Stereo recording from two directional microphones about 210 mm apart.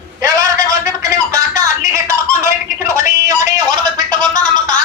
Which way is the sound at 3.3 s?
15° right (ahead or behind).